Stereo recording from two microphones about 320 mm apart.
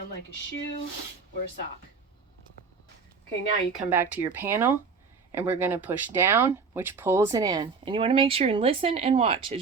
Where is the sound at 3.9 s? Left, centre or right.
Centre.